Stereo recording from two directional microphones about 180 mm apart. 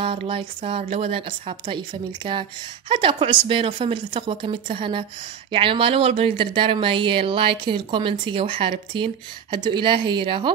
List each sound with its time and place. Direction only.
0.0 s a woman's voice: 30° right (ahead or behind)